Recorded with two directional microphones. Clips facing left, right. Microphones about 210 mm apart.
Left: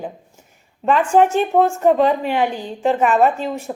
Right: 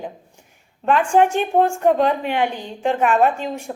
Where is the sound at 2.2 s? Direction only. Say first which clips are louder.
Left 2 dB; 40° left (ahead or behind).